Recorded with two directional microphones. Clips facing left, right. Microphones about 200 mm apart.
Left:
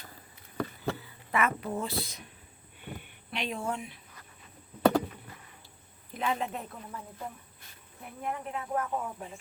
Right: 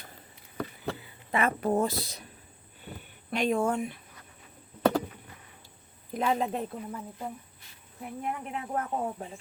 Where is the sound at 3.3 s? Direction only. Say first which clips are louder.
Right 8 dB; 45° right (ahead or behind).